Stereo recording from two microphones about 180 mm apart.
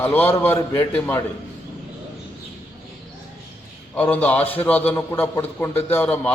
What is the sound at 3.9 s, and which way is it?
A man's voice, 10° left (ahead or behind).